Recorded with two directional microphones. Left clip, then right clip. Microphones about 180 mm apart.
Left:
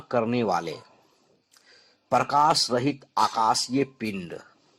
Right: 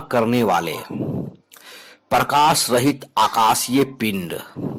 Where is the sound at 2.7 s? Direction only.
20° right (ahead or behind).